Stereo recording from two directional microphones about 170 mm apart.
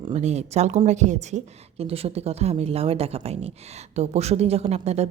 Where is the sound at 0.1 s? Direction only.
40° right (ahead or behind).